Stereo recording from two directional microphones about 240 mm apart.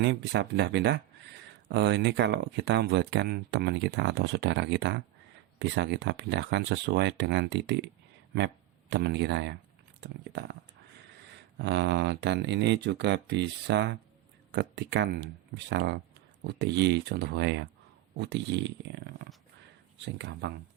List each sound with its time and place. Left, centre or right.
0.0 s speech: right
11.6 s speech: right